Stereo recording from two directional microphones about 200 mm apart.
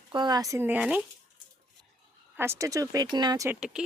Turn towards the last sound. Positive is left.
turn(degrees=-5)  # may be behind; listen again after turning